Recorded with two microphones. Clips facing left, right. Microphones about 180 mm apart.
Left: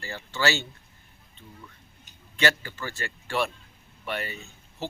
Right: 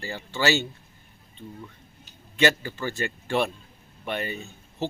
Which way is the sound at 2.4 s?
20° right (ahead or behind).